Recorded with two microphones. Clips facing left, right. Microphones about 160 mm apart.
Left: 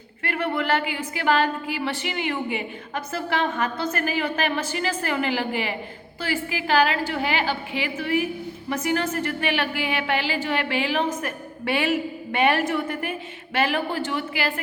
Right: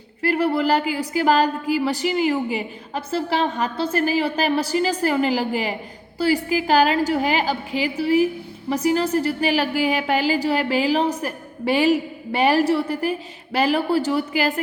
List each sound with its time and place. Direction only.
0.2 s a woman's voice: 35° right (ahead or behind)